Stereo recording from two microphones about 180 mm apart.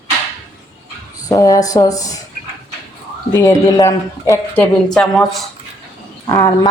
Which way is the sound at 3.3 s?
20° left (ahead or behind).